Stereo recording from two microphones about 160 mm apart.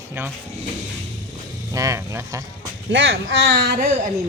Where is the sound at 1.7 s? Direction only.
20° right (ahead or behind).